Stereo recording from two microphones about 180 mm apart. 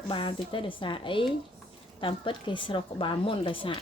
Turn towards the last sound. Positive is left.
turn(degrees=30)  # may be behind; listen again after turning